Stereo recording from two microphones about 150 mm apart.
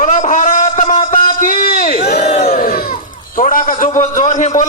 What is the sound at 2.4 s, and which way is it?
Crowd, 75° left (ahead or behind).